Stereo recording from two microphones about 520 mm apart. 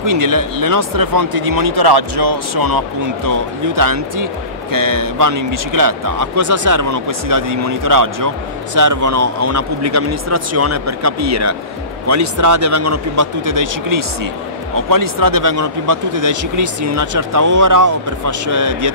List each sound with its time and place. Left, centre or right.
0.0 s speech: right